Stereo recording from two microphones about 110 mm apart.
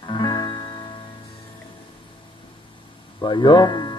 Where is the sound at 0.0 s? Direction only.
40° left (ahead or behind).